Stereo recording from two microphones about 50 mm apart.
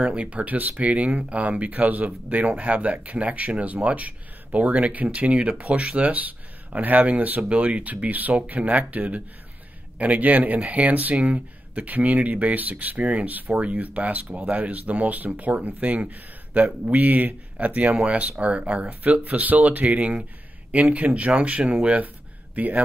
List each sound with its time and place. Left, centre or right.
0.0 s speech: right